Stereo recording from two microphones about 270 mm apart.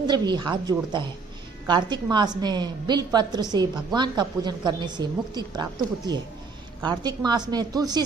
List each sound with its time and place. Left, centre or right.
0.1 s a woman's voice: centre
6.8 s a woman's voice: centre